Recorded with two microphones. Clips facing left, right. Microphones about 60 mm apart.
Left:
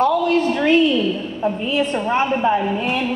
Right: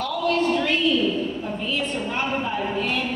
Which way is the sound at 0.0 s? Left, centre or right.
Left.